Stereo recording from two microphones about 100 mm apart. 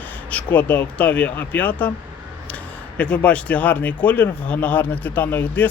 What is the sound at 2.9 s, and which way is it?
Speech, 15° left (ahead or behind).